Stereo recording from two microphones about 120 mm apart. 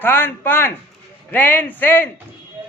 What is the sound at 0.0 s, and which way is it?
A man's voice, 15° left (ahead or behind).